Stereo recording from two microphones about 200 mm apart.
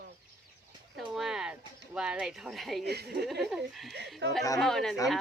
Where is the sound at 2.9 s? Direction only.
55° right (ahead or behind).